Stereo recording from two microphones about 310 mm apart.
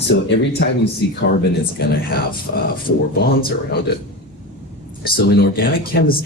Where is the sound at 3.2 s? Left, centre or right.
Left.